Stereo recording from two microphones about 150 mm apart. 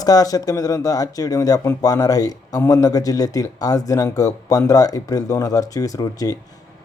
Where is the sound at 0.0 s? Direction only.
25° left (ahead or behind).